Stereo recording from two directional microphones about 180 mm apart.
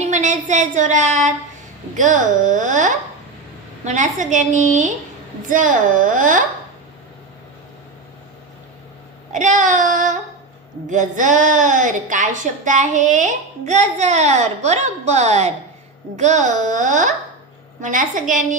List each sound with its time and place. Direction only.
0.0 s a woman's voice: 40° right (ahead or behind)
9.3 s child singing: 45° right (ahead or behind)
10.9 s a woman's voice: 45° right (ahead or behind)